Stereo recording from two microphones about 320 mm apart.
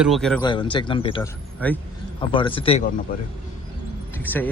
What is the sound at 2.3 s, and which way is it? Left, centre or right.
Speech, centre.